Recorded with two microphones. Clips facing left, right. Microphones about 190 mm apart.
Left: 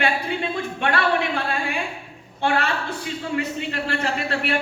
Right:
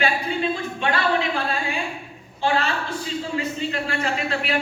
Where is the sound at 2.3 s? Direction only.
60° left (ahead or behind).